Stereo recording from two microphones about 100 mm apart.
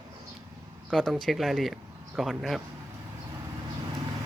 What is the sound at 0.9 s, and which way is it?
Speech, centre (ahead or behind).